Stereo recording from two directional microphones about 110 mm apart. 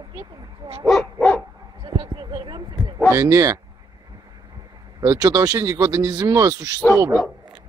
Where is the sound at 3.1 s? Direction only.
30° right (ahead or behind).